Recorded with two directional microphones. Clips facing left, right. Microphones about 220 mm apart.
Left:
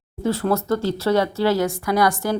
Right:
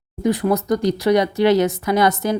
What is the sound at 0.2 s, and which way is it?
Speech, 15° right (ahead or behind).